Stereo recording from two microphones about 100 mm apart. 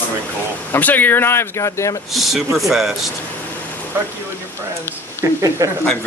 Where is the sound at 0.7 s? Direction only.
20° left (ahead or behind).